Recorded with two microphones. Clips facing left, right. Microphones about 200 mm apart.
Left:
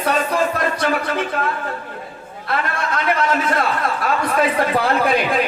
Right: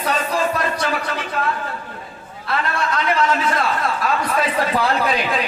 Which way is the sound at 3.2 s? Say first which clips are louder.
Even; 55° left (ahead or behind).